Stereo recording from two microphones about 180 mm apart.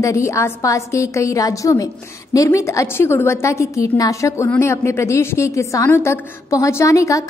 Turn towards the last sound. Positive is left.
turn(degrees=20)  # may be behind; listen again after turning